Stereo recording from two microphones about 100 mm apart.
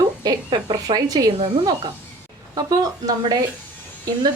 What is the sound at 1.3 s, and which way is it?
Speech, 75° right (ahead or behind).